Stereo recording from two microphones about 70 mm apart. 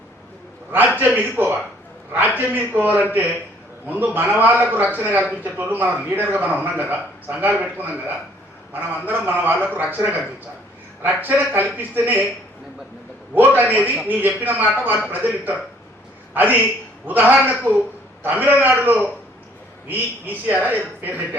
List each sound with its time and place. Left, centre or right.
0.7 s speech: right
9.0 s speech: right
13.3 s a man's voice: right